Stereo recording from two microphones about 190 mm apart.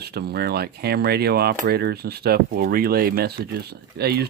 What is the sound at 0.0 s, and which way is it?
Speech, 55° right (ahead or behind).